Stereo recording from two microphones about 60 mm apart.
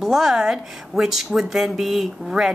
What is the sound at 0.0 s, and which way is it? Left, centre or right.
A man's voice, centre.